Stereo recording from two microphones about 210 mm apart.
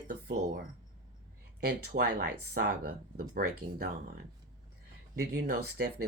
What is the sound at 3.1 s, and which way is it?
Speech, 45° right (ahead or behind).